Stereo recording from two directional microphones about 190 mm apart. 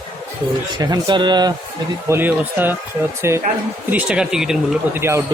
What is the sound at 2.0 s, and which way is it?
Speech, 10° right (ahead or behind).